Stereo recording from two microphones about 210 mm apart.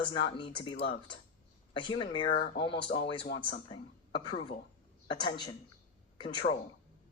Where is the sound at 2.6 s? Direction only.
25° left (ahead or behind).